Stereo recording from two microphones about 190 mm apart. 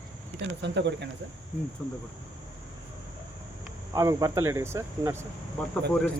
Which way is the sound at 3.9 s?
20° right (ahead or behind).